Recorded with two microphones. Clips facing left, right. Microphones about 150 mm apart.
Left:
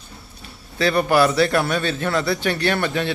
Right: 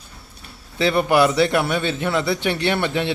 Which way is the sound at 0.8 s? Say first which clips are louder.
Even; 20° right (ahead or behind).